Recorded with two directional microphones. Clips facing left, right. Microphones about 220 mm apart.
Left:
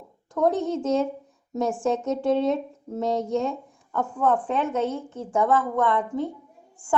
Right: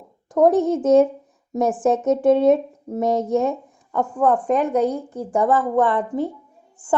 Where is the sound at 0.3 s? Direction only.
20° right (ahead or behind).